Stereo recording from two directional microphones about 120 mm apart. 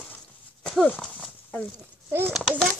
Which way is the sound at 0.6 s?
10° left (ahead or behind).